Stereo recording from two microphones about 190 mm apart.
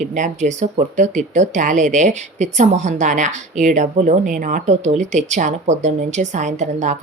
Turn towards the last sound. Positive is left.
turn(degrees=-40)  # may be behind; listen again after turning